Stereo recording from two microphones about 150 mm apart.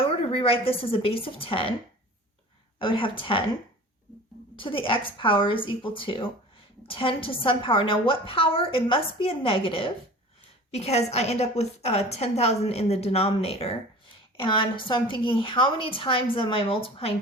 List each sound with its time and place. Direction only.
0.0 s a woman's voice: 40° left (ahead or behind)
2.7 s a woman's voice: 35° left (ahead or behind)
4.5 s a woman's voice: 35° left (ahead or behind)